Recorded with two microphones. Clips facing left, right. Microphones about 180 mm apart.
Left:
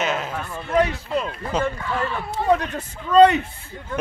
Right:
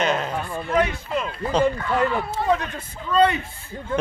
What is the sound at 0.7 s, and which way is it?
Speech, 35° left (ahead or behind).